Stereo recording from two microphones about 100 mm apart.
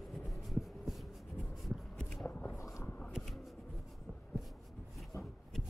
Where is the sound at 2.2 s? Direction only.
20° left (ahead or behind).